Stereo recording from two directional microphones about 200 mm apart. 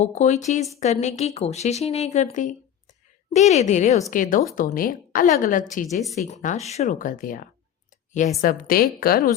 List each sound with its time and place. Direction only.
0.0 s a woman's voice: 35° left (ahead or behind)